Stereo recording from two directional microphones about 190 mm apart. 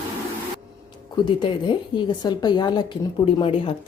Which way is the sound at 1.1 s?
25° left (ahead or behind).